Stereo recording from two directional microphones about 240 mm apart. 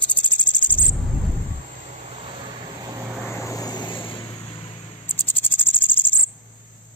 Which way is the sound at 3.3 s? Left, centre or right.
Centre.